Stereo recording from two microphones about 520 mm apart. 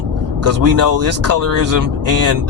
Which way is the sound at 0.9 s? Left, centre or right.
Right.